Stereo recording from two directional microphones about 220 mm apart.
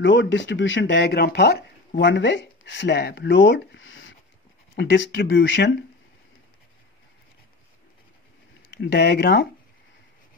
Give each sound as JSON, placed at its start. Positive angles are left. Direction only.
{"t": 0.0, "sound": "speech", "side_deg": 55}
{"t": 8.6, "sound": "speech", "side_deg": 50}